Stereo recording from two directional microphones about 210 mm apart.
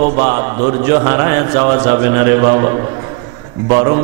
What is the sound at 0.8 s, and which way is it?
A man's voice, 15° right (ahead or behind).